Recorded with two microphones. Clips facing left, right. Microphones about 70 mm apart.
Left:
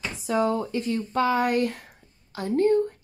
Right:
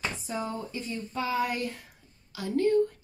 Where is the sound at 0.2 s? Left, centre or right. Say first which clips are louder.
Left 10 dB; left.